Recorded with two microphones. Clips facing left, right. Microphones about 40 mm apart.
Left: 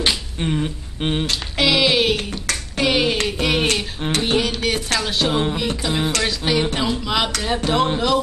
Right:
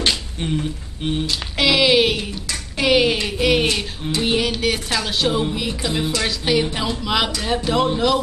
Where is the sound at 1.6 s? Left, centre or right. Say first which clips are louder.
Right 2 dB; centre.